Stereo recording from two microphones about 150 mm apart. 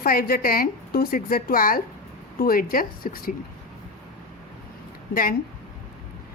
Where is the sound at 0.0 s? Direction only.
75° left (ahead or behind).